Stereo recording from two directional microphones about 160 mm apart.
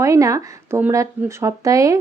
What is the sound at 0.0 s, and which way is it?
Speech, 20° right (ahead or behind).